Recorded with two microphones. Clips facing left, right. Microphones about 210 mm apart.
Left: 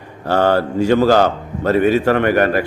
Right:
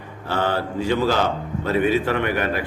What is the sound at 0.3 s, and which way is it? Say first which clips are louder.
A man's voice: left 8 dB; 45° left (ahead or behind).